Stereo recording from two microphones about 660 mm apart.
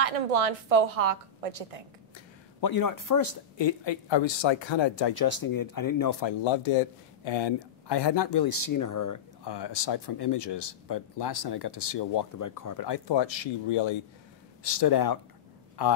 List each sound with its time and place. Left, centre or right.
0.0 s a woman's voice: right
2.1 s a man's voice: left